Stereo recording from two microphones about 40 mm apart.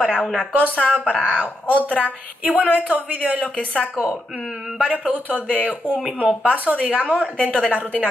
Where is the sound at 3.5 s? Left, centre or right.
Left.